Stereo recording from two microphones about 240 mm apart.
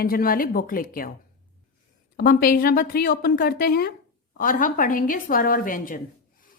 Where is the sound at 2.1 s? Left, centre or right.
Left.